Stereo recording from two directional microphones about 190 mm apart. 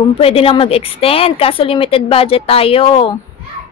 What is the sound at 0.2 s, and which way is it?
A woman's voice, 30° left (ahead or behind).